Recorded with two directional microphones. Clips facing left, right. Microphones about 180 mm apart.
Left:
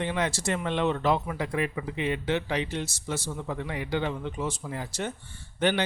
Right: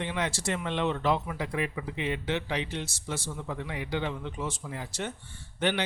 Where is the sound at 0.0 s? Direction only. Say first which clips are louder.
Left 3 dB; 45° left (ahead or behind).